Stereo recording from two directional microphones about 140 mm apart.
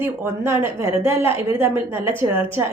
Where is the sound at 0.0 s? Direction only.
15° right (ahead or behind).